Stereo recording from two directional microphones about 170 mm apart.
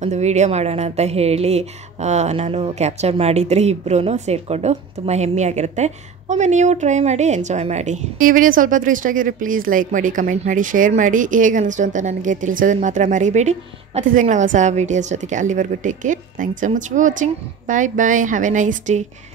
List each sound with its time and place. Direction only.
0.0 s a woman's voice: 40° right (ahead or behind)